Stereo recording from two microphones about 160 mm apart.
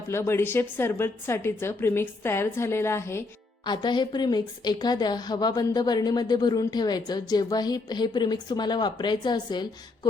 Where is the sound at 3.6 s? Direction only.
30° left (ahead or behind).